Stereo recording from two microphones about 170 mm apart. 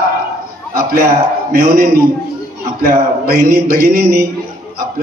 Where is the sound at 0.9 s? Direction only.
55° right (ahead or behind).